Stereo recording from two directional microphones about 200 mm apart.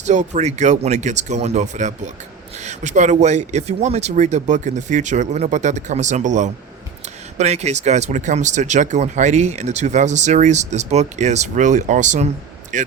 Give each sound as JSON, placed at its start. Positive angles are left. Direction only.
{"t": 0.0, "sound": "speech", "side_deg": -35}